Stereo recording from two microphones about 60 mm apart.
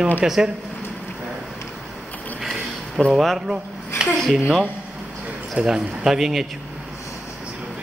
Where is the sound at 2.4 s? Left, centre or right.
Centre.